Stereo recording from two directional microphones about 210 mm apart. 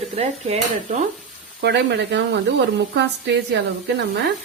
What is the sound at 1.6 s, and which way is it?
A woman's voice, 55° right (ahead or behind).